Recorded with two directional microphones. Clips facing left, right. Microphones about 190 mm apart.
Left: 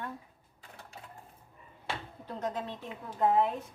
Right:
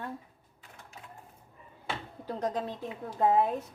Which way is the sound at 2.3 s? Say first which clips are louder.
Right 3 dB; 35° right (ahead or behind).